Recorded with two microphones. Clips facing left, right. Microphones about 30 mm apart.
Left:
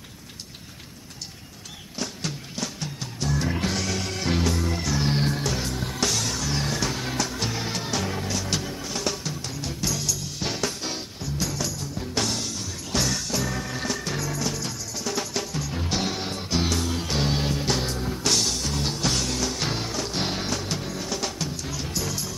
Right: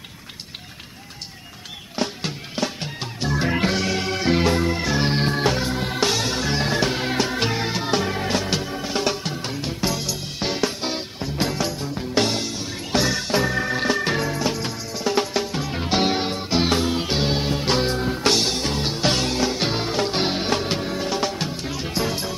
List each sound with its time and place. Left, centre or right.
2.0 s music: right